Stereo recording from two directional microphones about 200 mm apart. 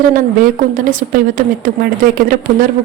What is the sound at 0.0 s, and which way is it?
Speech, 45° right (ahead or behind).